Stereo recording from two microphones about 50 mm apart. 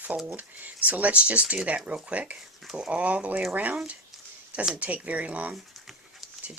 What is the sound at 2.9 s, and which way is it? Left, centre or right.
Speech, right.